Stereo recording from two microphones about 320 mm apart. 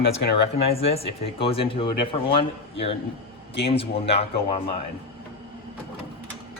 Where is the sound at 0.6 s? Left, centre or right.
Centre.